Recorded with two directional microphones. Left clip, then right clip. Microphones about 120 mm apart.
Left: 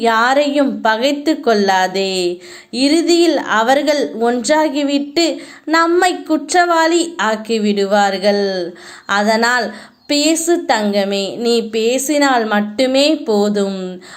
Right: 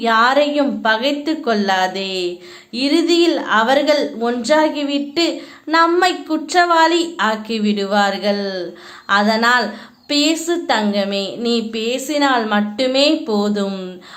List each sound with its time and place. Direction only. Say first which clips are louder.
0.0 s a woman's voice: left 1 dB; 35° left (ahead or behind); by 13.9 s 20° left (ahead or behind)